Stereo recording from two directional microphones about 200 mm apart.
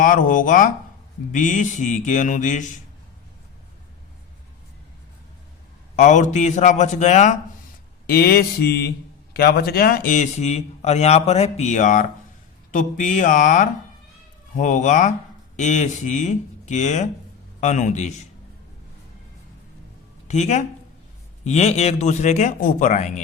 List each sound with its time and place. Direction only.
0.0 s speech: 40° left (ahead or behind)
6.0 s speech: 35° left (ahead or behind)
8.0 s mantra: 50° left (ahead or behind)
9.3 s speech: 50° left (ahead or behind); by 18.1 s 35° left (ahead or behind)
20.2 s speech: 35° left (ahead or behind)